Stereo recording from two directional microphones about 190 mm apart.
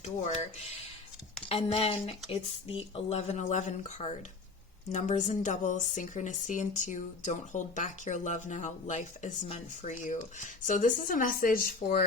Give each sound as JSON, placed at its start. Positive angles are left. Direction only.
{"t": 1.5, "sound": "speech", "side_deg": 30}